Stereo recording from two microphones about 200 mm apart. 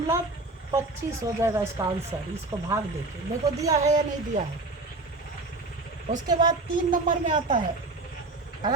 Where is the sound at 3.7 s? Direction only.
35° right (ahead or behind).